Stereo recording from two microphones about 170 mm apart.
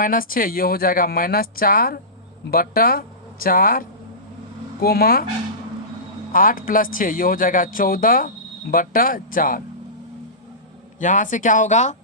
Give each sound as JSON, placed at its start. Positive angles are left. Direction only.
{"t": 0.0, "sound": "speech", "side_deg": 55}
{"t": 6.3, "sound": "speech", "side_deg": 55}
{"t": 11.0, "sound": "speech", "side_deg": 45}